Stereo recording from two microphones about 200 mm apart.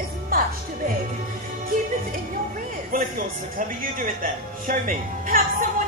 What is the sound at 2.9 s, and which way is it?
Speech, 45° right (ahead or behind).